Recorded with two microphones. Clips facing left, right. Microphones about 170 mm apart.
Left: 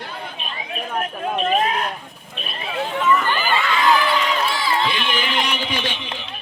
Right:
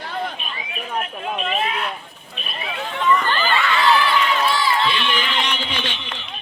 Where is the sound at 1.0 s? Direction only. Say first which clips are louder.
Left 4 dB; 40° left (ahead or behind).